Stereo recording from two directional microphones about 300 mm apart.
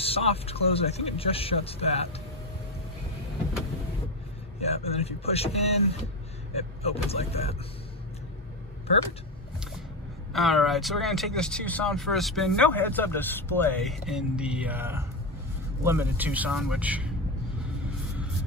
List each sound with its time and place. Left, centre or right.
0.0 s speech: centre
4.6 s speech: left
10.3 s speech: centre